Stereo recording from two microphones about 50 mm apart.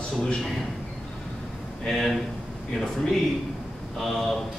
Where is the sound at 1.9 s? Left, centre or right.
Centre.